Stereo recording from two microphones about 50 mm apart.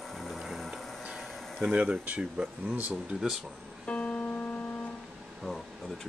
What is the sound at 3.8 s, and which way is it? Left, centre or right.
Music, left.